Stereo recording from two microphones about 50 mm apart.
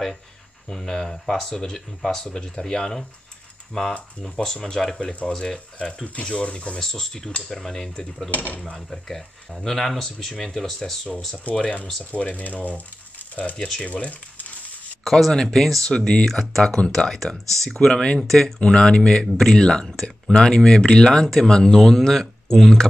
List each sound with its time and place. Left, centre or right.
0.7 s speech: centre
6.8 s speech: centre
8.3 s speech: left
8.7 s speech: centre
12.0 s speech: left
15.0 s speech: centre
18.6 s speech: centre